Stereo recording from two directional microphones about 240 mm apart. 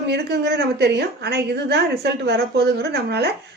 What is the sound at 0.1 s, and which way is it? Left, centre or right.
A woman's voice, right.